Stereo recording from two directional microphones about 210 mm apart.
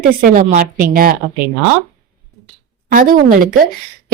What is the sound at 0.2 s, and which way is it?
Speech, 40° right (ahead or behind).